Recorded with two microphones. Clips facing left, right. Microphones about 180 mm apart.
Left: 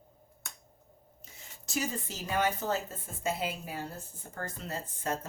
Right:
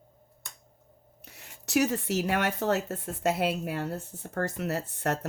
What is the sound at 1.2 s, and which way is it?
Speech, 70° right (ahead or behind).